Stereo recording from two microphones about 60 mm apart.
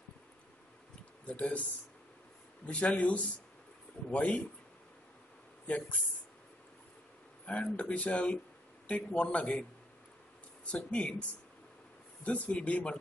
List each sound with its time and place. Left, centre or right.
1.2 s speech: left
5.7 s speech: left
7.4 s speech: left
10.7 s speech: centre